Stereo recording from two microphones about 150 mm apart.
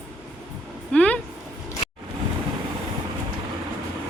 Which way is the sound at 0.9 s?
10° left (ahead or behind).